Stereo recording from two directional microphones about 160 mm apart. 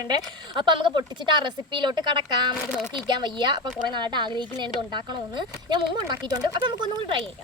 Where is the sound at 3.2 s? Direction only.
30° right (ahead or behind).